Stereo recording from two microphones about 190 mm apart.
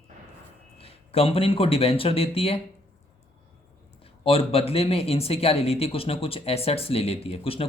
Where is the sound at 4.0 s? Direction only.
30° left (ahead or behind).